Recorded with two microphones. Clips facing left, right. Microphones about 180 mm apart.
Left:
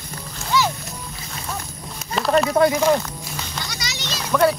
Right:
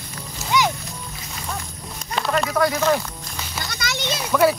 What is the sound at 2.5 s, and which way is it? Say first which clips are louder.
Speech: left 3 dB; 25° left (ahead or behind).